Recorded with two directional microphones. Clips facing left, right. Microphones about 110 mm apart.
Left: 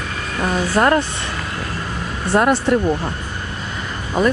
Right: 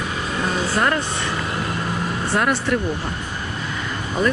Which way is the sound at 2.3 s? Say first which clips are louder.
Left 6 dB; 25° left (ahead or behind).